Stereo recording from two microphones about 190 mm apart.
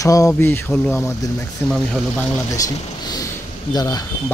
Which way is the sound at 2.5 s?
20° left (ahead or behind).